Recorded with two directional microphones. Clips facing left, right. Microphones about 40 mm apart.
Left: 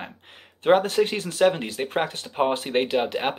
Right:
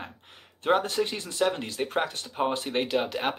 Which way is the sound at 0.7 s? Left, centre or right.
Left.